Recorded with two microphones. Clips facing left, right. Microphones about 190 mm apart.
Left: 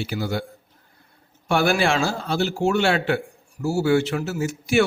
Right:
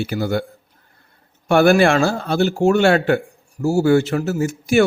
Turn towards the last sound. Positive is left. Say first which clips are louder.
# right 4 dB
turn(degrees=-45)  # may be behind; listen again after turning